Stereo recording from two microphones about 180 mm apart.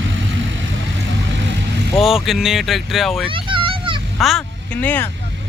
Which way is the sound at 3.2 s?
30° right (ahead or behind).